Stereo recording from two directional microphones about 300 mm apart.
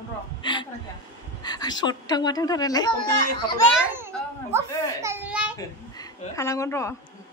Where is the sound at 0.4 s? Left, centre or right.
Centre.